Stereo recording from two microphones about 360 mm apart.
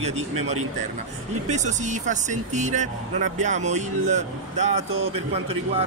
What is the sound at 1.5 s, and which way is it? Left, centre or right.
Speech, centre.